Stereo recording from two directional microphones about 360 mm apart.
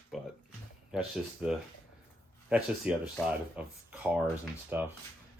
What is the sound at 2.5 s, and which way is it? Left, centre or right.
Speech, centre.